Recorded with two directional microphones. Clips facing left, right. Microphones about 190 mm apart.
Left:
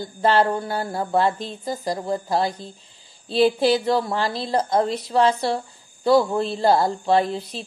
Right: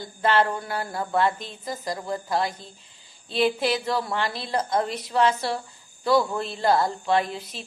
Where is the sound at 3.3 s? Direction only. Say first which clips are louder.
Left 5 dB; 30° left (ahead or behind).